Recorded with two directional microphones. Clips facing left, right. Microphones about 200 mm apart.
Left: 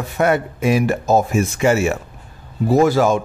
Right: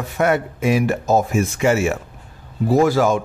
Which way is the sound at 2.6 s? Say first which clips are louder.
Left 1 dB; 25° left (ahead or behind).